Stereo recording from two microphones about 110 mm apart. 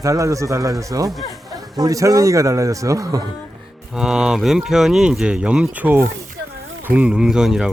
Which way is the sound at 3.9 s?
5° right (ahead or behind).